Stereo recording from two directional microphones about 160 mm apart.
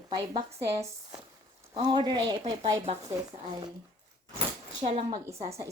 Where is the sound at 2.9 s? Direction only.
40° right (ahead or behind).